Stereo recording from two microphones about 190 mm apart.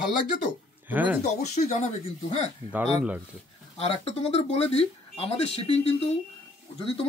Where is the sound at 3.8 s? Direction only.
35° left (ahead or behind).